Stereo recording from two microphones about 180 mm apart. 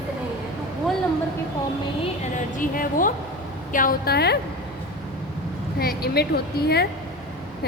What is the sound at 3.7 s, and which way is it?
Speech, 50° left (ahead or behind).